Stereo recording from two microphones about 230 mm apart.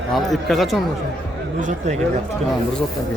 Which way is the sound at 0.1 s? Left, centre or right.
Centre.